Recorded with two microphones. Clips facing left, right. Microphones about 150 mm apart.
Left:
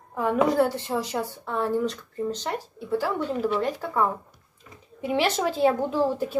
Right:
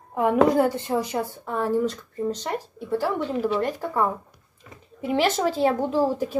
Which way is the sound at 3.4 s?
10° right (ahead or behind).